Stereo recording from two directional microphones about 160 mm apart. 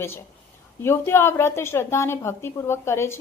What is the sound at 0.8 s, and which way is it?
A woman's voice, 15° left (ahead or behind).